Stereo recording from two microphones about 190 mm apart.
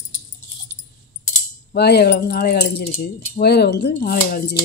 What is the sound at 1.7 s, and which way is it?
Speech, 60° left (ahead or behind).